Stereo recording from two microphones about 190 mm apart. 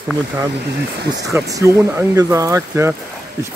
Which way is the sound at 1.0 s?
65° right (ahead or behind).